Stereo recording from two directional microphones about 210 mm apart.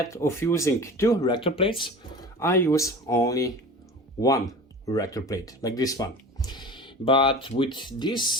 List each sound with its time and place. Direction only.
0.0 s speech: 15° left (ahead or behind)
2.4 s speech: 15° left (ahead or behind)